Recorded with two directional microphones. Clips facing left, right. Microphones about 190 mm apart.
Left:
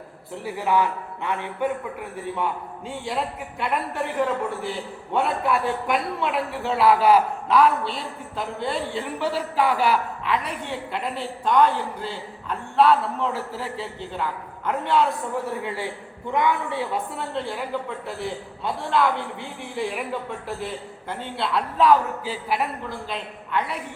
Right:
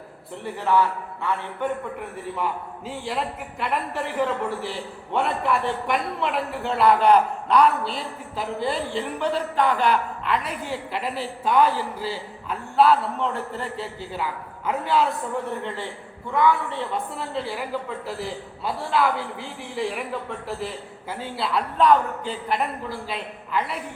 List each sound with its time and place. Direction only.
0.4 s a man's voice: 10° left (ahead or behind)
1.6 s a man's voice: centre (ahead or behind)
17.2 s a man's voice: 5° right (ahead or behind)